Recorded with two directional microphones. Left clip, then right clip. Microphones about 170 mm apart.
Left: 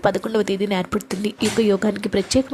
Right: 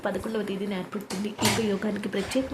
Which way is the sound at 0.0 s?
40° left (ahead or behind).